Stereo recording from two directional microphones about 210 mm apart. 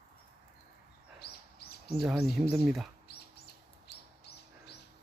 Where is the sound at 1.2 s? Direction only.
50° left (ahead or behind).